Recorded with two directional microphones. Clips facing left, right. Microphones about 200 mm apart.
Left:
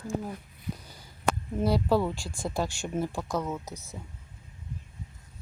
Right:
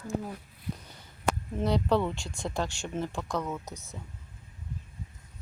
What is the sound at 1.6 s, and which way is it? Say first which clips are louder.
Speech: left 1 dB; 5° left (ahead or behind).